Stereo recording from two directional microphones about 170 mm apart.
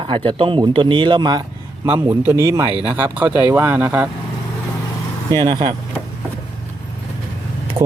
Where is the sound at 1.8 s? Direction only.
10° right (ahead or behind).